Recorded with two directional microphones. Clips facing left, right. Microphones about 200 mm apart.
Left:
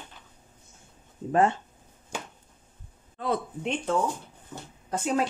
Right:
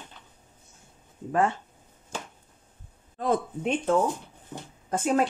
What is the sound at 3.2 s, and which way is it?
Speech, 45° right (ahead or behind).